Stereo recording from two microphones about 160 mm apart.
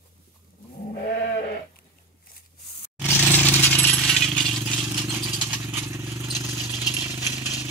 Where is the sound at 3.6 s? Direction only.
10° left (ahead or behind).